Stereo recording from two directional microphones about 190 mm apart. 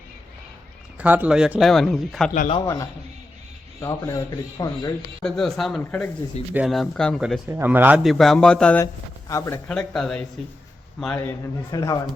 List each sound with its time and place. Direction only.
0.9 s a man's voice: 10° right (ahead or behind)
2.6 s speech: 15° left (ahead or behind)
5.2 s a man's voice: centre (ahead or behind)
7.5 s a man's voice: 10° right (ahead or behind); by 12.0 s 20° left (ahead or behind)